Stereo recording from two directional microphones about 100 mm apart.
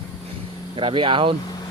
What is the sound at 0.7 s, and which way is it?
Speech, 60° right (ahead or behind).